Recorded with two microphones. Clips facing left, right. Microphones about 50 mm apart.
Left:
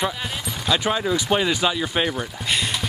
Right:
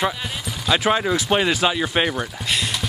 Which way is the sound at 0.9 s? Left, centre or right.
Right.